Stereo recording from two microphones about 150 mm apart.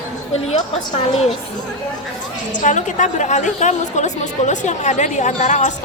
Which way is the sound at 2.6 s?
55° left (ahead or behind).